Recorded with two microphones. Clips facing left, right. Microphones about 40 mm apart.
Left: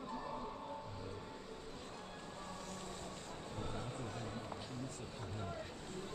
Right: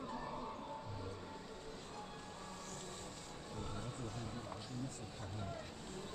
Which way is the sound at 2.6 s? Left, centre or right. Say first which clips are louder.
Left 2 dB; centre.